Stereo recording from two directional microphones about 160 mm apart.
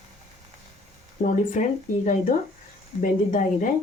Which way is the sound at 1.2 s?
50° left (ahead or behind).